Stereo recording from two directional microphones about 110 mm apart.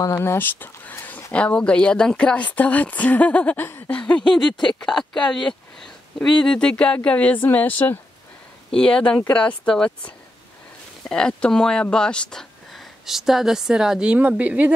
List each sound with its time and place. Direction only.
0.2 s speech: 20° left (ahead or behind); by 14.7 s 10° right (ahead or behind)